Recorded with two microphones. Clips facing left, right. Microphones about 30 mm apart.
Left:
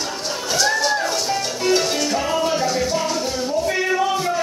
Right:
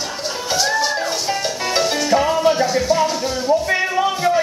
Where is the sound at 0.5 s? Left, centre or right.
Centre.